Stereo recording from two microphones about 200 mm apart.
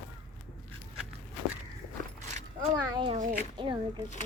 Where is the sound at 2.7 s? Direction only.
20° right (ahead or behind).